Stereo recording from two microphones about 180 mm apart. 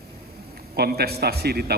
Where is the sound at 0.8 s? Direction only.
60° right (ahead or behind).